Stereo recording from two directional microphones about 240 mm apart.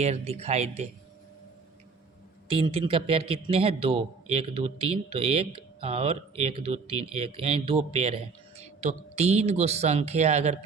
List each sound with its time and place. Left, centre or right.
0.0 s a man's voice: right
2.5 s a man's voice: right